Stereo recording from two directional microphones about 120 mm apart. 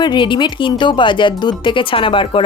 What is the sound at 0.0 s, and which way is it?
Speech, 40° left (ahead or behind).